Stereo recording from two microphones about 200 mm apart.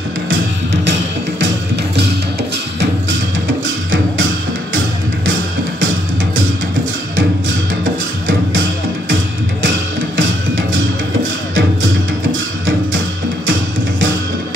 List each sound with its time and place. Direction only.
3.6 s music: 75° right (ahead or behind)
7.2 s music: 75° right (ahead or behind)